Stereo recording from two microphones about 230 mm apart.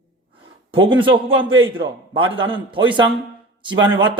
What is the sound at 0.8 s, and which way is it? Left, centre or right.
A man's voice, right.